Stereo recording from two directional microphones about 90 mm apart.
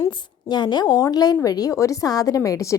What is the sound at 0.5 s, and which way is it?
A woman's voice, 55° left (ahead or behind).